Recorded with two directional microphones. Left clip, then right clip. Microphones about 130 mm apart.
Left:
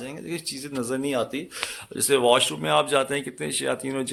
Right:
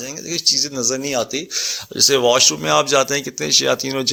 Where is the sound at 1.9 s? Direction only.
40° right (ahead or behind).